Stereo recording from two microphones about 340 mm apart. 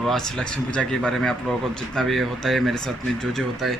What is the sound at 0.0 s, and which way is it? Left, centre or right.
Speech, centre.